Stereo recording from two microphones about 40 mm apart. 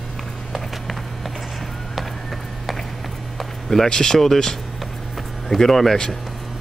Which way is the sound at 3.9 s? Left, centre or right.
Centre.